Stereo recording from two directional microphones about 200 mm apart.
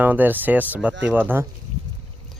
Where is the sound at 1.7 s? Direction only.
90° right.